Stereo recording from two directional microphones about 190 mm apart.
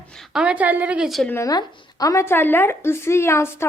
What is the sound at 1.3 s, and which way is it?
A woman's voice, 15° left (ahead or behind).